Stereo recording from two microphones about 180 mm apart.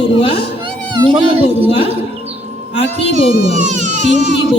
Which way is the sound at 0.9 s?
25° right (ahead or behind).